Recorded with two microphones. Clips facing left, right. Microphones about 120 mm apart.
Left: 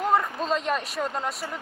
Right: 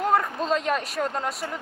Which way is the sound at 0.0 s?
Centre (ahead or behind).